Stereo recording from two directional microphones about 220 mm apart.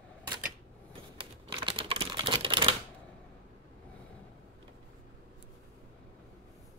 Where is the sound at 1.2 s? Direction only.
25° right (ahead or behind).